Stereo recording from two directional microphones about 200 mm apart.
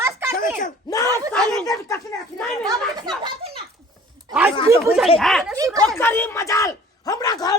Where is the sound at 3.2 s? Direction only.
30° right (ahead or behind).